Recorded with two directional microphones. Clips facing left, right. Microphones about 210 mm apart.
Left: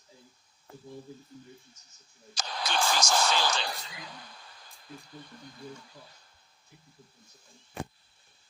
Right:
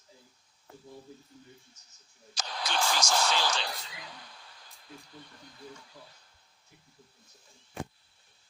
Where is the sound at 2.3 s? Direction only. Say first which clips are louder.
Left 2 dB; 45° left (ahead or behind).